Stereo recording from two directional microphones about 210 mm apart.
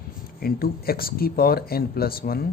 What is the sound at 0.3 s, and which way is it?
A man's voice, 45° left (ahead or behind).